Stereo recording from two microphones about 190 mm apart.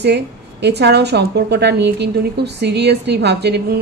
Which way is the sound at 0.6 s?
60° right (ahead or behind).